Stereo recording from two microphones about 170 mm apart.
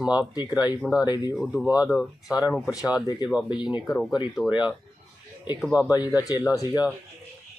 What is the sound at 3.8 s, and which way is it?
Speech, centre (ahead or behind).